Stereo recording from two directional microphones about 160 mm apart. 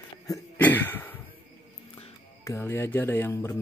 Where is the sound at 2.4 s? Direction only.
15° left (ahead or behind).